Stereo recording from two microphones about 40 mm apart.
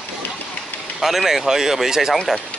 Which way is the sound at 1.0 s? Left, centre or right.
Centre.